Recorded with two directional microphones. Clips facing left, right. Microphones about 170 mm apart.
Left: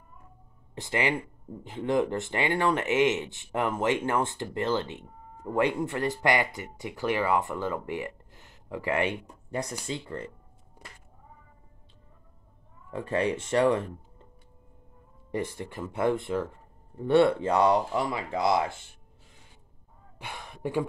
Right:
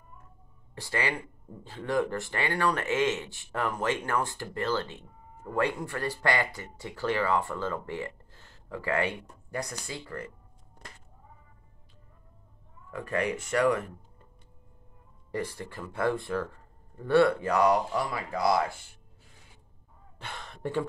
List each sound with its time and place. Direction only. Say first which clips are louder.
0.7 s speech: left 3 dB; 20° left (ahead or behind)
12.9 s speech: left 3 dB; 30° left (ahead or behind)
15.3 s speech: left 2 dB; 20° left (ahead or behind)
20.2 s speech: left 1 dB; 10° left (ahead or behind)